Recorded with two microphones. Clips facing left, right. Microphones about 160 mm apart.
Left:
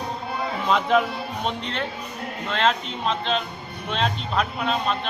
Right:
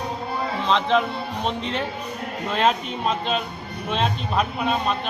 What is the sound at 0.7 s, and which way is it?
Speech, 5° left (ahead or behind).